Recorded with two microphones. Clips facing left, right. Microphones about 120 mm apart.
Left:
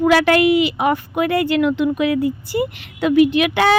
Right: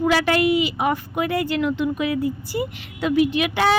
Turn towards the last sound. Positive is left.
turn(degrees=70)  # may be behind; listen again after turning